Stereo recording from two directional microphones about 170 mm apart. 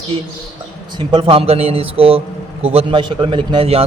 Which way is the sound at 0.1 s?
35° right (ahead or behind).